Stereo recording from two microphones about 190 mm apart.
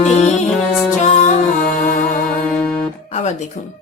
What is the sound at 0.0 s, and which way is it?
Music, 35° left (ahead or behind).